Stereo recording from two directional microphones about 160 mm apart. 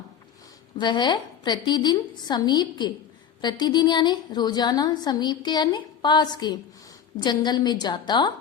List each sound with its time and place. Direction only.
0.8 s a woman's voice: 30° left (ahead or behind)